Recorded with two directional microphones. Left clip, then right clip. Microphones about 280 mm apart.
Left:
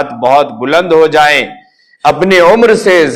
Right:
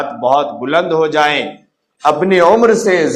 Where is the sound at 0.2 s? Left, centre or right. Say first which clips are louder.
Left 5 dB; left.